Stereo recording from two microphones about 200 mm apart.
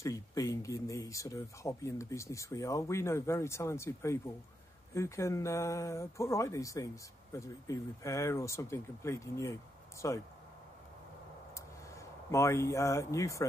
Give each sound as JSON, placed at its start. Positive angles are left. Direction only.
{"t": 0.0, "sound": "speech", "side_deg": 15}
{"t": 12.0, "sound": "speech", "side_deg": 15}